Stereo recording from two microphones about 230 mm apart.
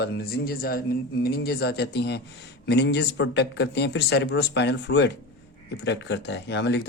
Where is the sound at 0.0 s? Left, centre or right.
Left.